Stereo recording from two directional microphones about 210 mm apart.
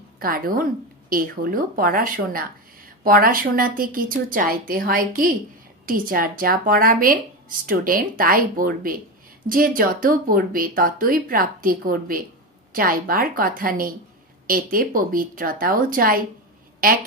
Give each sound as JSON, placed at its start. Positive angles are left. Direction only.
{"t": 0.2, "sound": "a woman's voice", "side_deg": -45}